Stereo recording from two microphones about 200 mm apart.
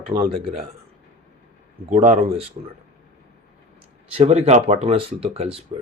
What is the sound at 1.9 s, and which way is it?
Speech, 35° right (ahead or behind).